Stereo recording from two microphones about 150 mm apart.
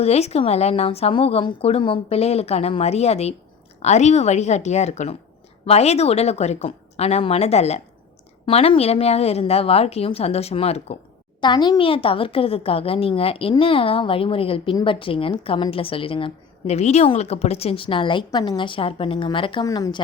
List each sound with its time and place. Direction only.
0.0 s speech: 45° left (ahead or behind)
11.3 s a woman's voice: 30° left (ahead or behind)